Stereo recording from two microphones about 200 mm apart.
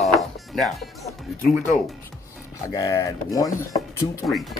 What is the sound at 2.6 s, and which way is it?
Speech, 15° left (ahead or behind).